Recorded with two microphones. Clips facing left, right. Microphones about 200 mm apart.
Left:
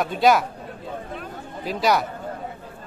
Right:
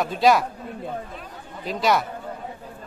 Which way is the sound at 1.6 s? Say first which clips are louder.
Left 1 dB; centre (ahead or behind).